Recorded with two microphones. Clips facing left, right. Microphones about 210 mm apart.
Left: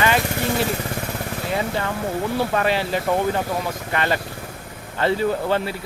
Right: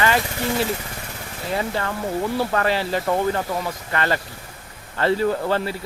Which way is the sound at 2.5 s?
20° left (ahead or behind).